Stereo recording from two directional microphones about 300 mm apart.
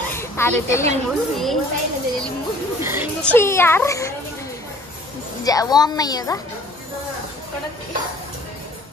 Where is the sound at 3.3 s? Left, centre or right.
Centre.